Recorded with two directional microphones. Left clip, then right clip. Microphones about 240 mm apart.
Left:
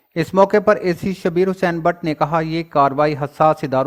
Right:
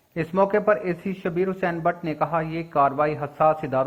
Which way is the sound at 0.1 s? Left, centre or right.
Left.